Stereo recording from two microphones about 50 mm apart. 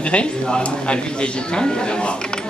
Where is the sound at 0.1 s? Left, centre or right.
Left.